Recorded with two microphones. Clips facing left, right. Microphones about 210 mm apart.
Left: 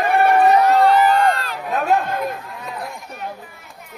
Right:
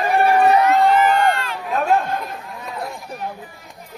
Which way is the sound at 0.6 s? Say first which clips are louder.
Left 1 dB; 35° left (ahead or behind).